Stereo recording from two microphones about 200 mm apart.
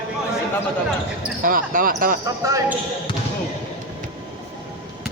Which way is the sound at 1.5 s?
45° right (ahead or behind).